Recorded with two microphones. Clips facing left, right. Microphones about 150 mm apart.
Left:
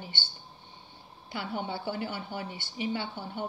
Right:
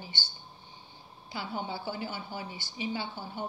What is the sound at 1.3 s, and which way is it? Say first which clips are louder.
A woman's voice: left 2 dB; 60° left (ahead or behind).